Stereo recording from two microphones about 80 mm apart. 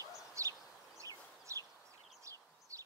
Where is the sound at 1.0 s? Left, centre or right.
Right.